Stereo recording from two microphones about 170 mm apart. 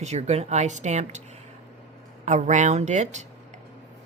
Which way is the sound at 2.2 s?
45° right (ahead or behind).